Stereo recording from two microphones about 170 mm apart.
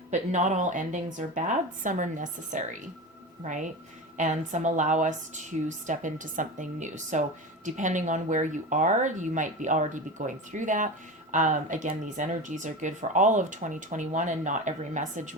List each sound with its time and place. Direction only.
0.1 s a woman's voice: 45° right (ahead or behind)